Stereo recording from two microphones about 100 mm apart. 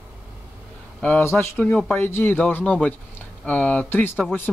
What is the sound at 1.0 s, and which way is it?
A man's voice, 15° left (ahead or behind).